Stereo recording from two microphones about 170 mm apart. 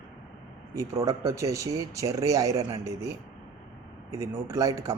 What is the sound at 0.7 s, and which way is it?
Speech, 20° right (ahead or behind).